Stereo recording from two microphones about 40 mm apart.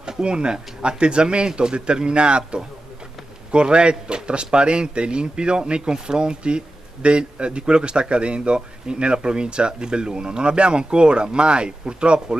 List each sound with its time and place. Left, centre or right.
0.2 s speech: right